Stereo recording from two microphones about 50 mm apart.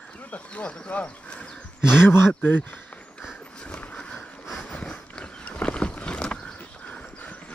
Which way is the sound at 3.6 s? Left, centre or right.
Left.